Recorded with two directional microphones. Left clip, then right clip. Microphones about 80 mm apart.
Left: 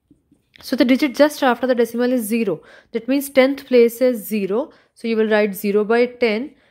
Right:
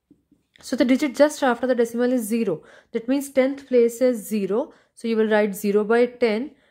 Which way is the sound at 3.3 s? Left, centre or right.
Left.